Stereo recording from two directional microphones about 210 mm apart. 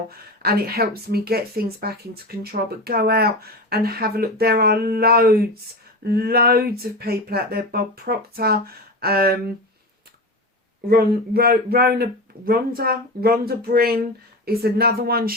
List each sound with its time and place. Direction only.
0.4 s speech: 45° right (ahead or behind)
10.8 s speech: 45° right (ahead or behind)